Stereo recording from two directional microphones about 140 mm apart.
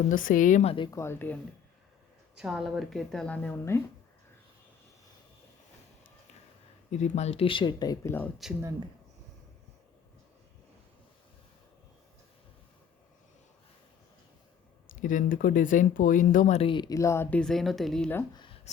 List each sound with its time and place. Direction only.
0.1 s speech: 75° left (ahead or behind)
0.9 s speech: 20° left (ahead or behind)
2.3 s speech: 5° right (ahead or behind); by 3.8 s 15° left (ahead or behind)
6.9 s speech: 55° left (ahead or behind); by 8.1 s 30° left (ahead or behind)
8.4 s speech: centre (ahead or behind)
15.0 s speech: 70° left (ahead or behind)
16.6 s speech: 35° left (ahead or behind); by 17.4 s 20° left (ahead or behind)
17.4 s speech: centre (ahead or behind)